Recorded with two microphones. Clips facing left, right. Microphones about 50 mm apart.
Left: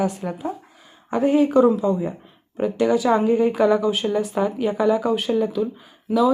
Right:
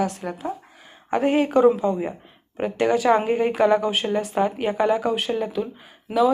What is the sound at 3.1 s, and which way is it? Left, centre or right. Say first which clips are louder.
Speech: right 1 dB; right.